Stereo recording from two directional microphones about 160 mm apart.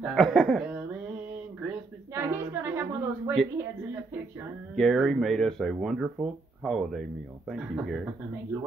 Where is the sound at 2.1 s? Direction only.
15° right (ahead or behind).